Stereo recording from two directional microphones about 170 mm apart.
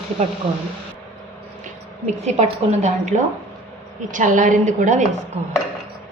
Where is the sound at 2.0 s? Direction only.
40° right (ahead or behind).